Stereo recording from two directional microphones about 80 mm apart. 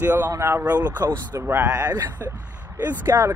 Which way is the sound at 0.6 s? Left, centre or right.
Right.